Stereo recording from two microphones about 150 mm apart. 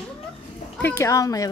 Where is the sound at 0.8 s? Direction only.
15° left (ahead or behind).